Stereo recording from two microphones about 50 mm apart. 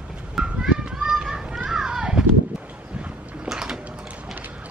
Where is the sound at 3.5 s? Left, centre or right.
Centre.